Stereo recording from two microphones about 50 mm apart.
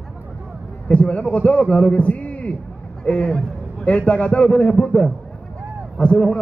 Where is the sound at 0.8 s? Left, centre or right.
Left.